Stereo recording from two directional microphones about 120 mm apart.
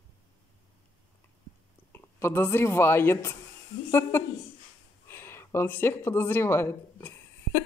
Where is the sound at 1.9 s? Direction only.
20° left (ahead or behind).